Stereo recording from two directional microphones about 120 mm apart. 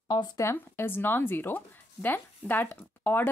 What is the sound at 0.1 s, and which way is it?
Speech, 35° left (ahead or behind).